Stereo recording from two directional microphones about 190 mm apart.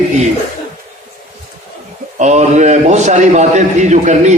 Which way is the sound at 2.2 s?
35° right (ahead or behind).